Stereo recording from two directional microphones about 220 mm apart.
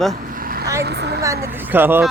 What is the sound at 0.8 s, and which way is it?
Speech, 50° right (ahead or behind).